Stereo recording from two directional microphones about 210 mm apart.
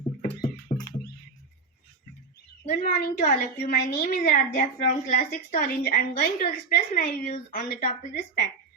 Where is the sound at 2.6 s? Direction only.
40° left (ahead or behind).